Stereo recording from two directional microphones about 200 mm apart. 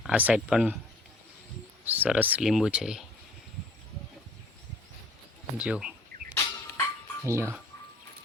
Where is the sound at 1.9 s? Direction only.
5° right (ahead or behind).